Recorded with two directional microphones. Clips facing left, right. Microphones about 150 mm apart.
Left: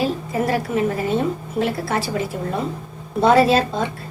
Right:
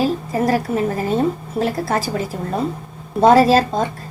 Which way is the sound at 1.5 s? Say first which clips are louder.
Even; 40° right (ahead or behind).